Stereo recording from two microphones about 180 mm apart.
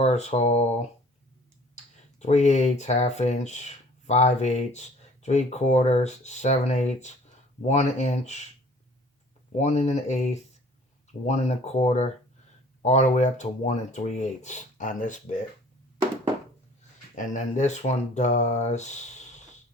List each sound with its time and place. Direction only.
0.0 s speech: 35° left (ahead or behind)
1.7 s speech: 40° left (ahead or behind)
9.6 s speech: 40° left (ahead or behind)
17.2 s speech: 40° left (ahead or behind)